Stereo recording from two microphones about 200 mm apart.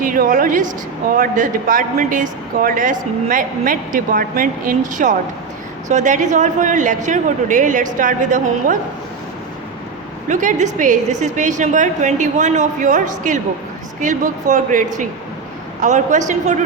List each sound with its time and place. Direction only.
0.0 s a woman's voice: 45° right (ahead or behind)
10.2 s a woman's voice: 40° right (ahead or behind)